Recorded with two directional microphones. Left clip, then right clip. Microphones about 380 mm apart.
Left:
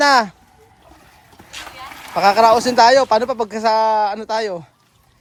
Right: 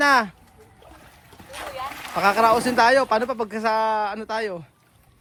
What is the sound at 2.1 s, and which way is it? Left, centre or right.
Speech, centre.